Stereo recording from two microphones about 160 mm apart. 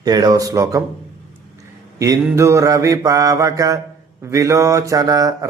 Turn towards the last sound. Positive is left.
turn(degrees=-20)  # may be behind; listen again after turning